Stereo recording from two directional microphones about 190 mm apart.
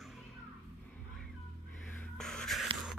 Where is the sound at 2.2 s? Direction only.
5° left (ahead or behind).